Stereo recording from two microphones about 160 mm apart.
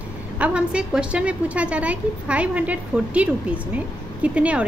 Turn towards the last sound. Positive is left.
turn(degrees=-10)  # may be behind; listen again after turning